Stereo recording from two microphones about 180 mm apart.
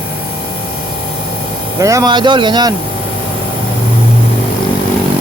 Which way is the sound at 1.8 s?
20° right (ahead or behind).